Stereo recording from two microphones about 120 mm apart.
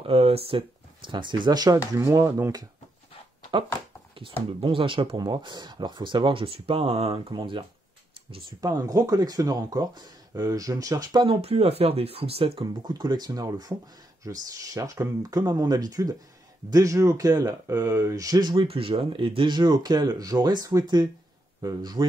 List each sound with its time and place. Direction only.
0.0 s speech: 55° right (ahead or behind); by 2.6 s 30° right (ahead or behind)
3.5 s speech: 40° right (ahead or behind); by 7.3 s 55° right (ahead or behind)
7.3 s speech: 45° right (ahead or behind)
8.5 s speech: 30° right (ahead or behind)
11.2 s speech: 55° right (ahead or behind)
12.8 s speech: 35° right (ahead or behind)
18.7 s a man's voice: 50° right (ahead or behind); by 22.0 s 30° right (ahead or behind)